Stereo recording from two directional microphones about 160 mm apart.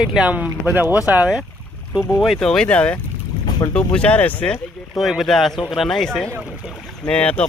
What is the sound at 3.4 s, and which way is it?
Boat, 30° left (ahead or behind).